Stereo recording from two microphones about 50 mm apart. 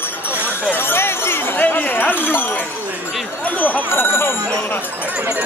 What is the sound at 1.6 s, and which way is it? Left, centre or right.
Speech, left.